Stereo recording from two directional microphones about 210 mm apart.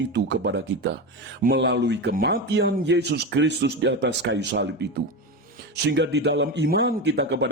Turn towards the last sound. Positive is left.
turn(degrees=-55)  # may be behind; listen again after turning